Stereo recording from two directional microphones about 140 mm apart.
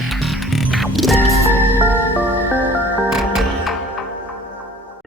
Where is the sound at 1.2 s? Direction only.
15° left (ahead or behind).